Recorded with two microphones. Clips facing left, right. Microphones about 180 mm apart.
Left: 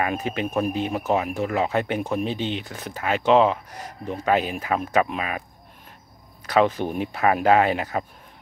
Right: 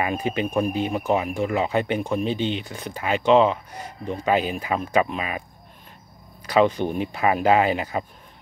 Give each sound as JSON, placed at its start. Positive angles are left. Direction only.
{"t": 0.0, "sound": "speech", "side_deg": 0}
{"t": 6.4, "sound": "speech", "side_deg": 0}